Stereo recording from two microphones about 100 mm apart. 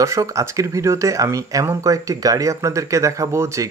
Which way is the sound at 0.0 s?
30° right (ahead or behind).